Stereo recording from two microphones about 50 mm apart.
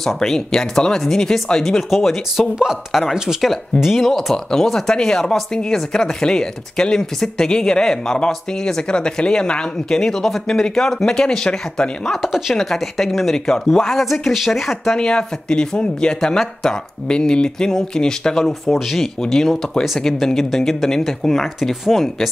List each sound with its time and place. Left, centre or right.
0.0 s speech: centre
12.2 s speech: centre
15.0 s speech: centre
18.7 s speech: centre